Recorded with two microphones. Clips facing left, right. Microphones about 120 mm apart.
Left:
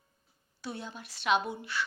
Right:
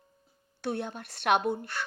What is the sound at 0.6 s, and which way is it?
Speech, 60° right (ahead or behind).